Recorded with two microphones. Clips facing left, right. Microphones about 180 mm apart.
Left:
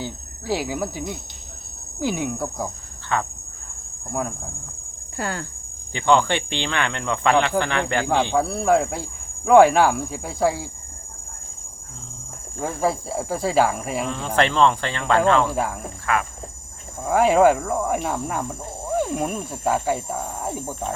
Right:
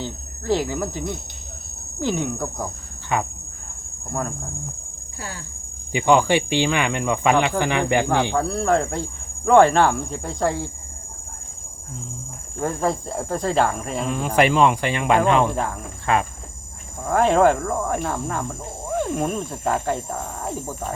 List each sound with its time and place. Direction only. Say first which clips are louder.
0.0 s speech: right 1 dB; 10° left (ahead or behind)
2.0 s insect: even; 10° left (ahead or behind)
3.1 s cricket: right 1 dB; 15° right (ahead or behind)
5.1 s cricket: left 7 dB; 65° left (ahead or behind)
5.9 s cricket: right 2 dB; 10° right (ahead or behind)
8.3 s insect: left 1 dB; 10° left (ahead or behind)
12.6 s insect: even; 5° left (ahead or behind)
14.1 s cricket: right 4 dB; 10° right (ahead or behind)
17.1 s insect: left 1 dB; 5° left (ahead or behind)